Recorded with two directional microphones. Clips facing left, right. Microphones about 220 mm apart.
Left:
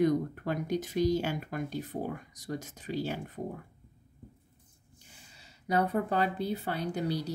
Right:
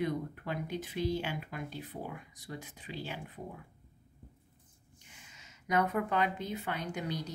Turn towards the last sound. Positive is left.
turn(degrees=35)  # may be behind; listen again after turning